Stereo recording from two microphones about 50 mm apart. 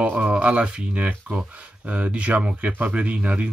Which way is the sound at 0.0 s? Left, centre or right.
Right.